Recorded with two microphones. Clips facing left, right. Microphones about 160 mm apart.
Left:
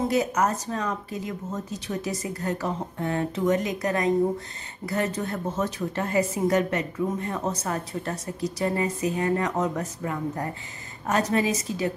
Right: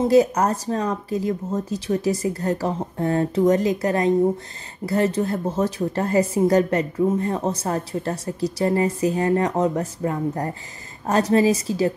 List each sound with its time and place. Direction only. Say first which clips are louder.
0.1 s a woman's voice: right 7 dB; 35° right (ahead or behind)